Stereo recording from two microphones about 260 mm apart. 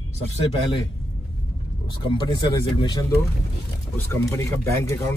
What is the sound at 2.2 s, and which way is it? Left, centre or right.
Speech, centre.